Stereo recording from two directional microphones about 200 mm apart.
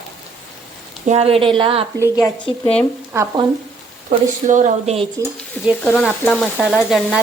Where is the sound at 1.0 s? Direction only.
30° right (ahead or behind).